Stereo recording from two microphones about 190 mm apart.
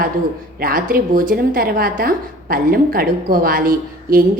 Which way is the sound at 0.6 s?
50° right (ahead or behind).